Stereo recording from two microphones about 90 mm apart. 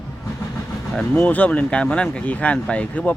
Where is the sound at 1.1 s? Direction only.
20° left (ahead or behind).